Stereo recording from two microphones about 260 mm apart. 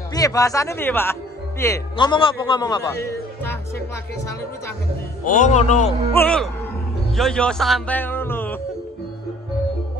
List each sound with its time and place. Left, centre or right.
0.1 s a man's voice: centre
5.2 s a man's voice: left
6.1 s speech: centre